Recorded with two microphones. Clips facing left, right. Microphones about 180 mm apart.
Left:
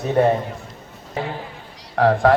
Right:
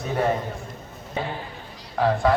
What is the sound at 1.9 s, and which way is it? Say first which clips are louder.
Speech: left 5 dB; 75° left (ahead or behind).